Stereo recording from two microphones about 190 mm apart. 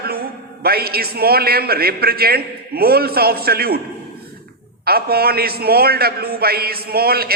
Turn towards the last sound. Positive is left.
turn(degrees=-55)  # may be behind; listen again after turning